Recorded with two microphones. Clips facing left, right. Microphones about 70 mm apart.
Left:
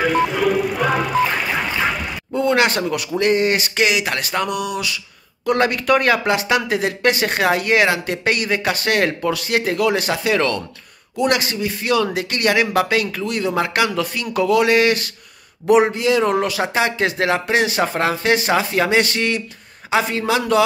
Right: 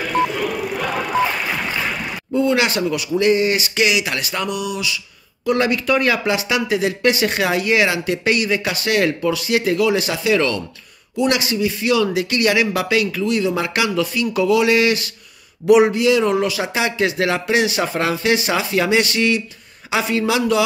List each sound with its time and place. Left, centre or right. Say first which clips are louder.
0.5 s music: left 6 dB; centre
2.3 s speech: even; left
15.6 s speech: right 2 dB; left